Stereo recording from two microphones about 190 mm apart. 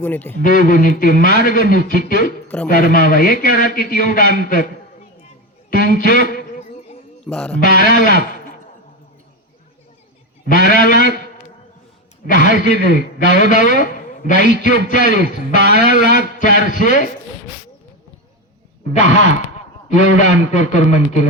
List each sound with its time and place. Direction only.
0.0 s a man's voice: 10° left (ahead or behind)
0.4 s a man's voice: 45° left (ahead or behind)
5.7 s a man's voice: 45° left (ahead or behind)
7.3 s music: 5° left (ahead or behind)
7.6 s a man's voice: 50° left (ahead or behind)
10.4 s a man's voice: 45° left (ahead or behind)
19.9 s speech: 40° left (ahead or behind)